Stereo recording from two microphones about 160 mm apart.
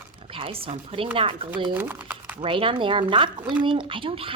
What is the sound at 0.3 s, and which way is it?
A woman's voice, 35° right (ahead or behind).